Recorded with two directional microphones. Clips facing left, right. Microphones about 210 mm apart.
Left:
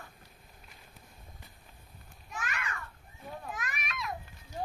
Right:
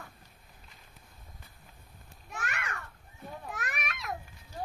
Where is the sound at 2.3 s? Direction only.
65° right (ahead or behind).